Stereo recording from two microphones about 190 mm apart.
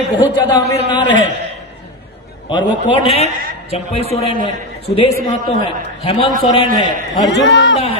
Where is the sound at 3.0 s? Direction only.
30° left (ahead or behind).